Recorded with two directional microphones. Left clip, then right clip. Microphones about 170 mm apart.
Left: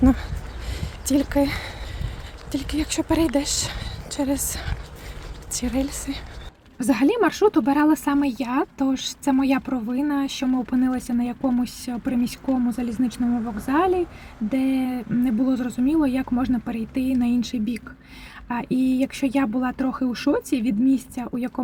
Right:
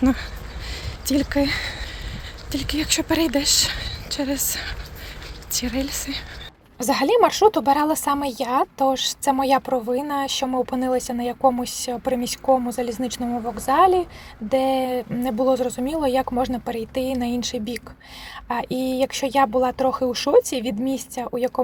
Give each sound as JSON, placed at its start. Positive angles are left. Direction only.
{"t": 0.0, "sound": "a woman's voice", "side_deg": 15}
{"t": 6.7, "sound": "speech", "side_deg": -30}